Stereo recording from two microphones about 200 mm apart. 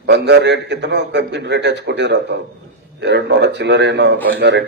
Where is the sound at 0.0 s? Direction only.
60° right (ahead or behind).